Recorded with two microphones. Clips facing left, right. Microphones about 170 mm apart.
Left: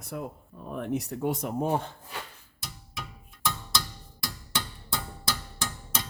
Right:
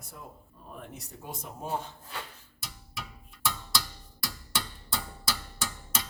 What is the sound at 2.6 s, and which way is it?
Percussion, 5° right (ahead or behind).